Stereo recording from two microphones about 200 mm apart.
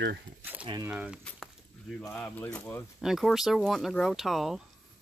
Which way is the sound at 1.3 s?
5° left (ahead or behind).